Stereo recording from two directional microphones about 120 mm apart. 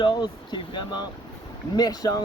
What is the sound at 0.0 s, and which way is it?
Speech, 40° left (ahead or behind).